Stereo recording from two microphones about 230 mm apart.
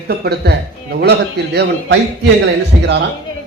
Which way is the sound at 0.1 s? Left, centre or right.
Right.